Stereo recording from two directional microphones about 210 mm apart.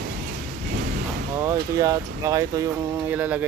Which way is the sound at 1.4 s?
15° right (ahead or behind).